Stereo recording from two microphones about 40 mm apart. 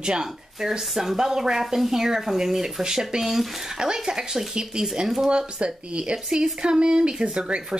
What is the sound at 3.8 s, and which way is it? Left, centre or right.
Speech, centre.